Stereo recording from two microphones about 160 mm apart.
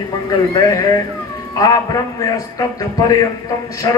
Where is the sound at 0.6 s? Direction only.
20° left (ahead or behind).